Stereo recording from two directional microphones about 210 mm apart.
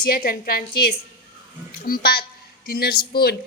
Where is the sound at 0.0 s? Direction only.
45° left (ahead or behind).